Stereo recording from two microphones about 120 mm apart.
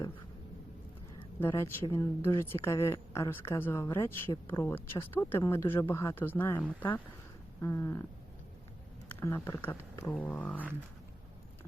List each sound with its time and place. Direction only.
1.4 s speech: 20° left (ahead or behind)
9.0 s speech: 20° left (ahead or behind)